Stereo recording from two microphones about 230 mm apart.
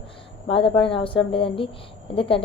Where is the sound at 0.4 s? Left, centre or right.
Left.